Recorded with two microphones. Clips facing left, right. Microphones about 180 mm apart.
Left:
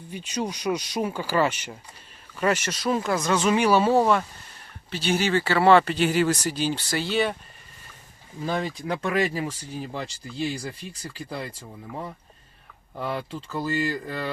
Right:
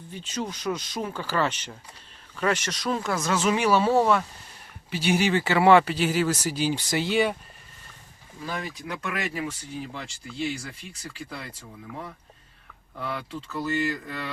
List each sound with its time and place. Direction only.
0.1 s speech: 15° left (ahead or behind)
4.9 s speech: 10° right (ahead or behind)
8.4 s speech: 30° left (ahead or behind)
13.0 s speech: 30° left (ahead or behind)